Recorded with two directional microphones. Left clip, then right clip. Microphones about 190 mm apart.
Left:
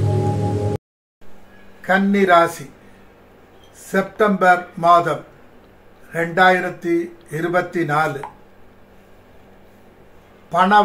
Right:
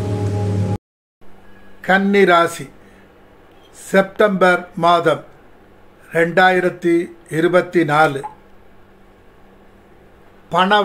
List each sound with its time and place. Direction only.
0.0 s music: centre (ahead or behind)
1.8 s speech: 50° right (ahead or behind)
3.9 s speech: 55° right (ahead or behind)
10.5 s a man's voice: 50° right (ahead or behind)